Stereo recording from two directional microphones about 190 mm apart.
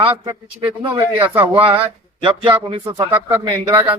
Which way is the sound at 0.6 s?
20° right (ahead or behind).